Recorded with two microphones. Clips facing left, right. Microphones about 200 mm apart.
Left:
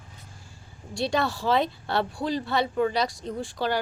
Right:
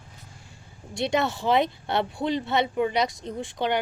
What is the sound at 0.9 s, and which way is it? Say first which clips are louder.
Speech: right 1 dB; 20° right (ahead or behind).